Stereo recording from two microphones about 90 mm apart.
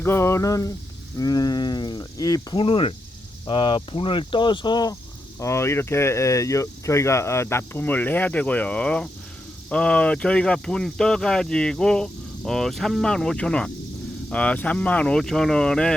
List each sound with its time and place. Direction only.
0.0 s a sound: 30° left (ahead or behind)
1.2 s livestock: 45° left (ahead or behind)
2.6 s speech: 85° left
3.4 s speech: 70° left (ahead or behind); by 4.9 s 50° left (ahead or behind)
5.4 s speech: 30° left (ahead or behind); by 16.0 s 5° left (ahead or behind)